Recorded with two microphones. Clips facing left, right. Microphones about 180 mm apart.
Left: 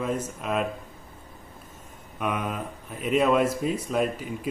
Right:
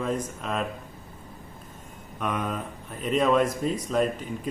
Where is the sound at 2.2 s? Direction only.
5° left (ahead or behind).